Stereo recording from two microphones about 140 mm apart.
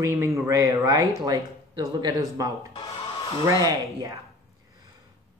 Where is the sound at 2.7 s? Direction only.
40° left (ahead or behind).